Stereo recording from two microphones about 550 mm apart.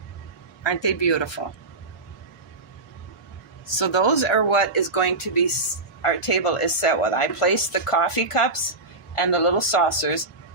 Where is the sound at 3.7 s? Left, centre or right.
Left.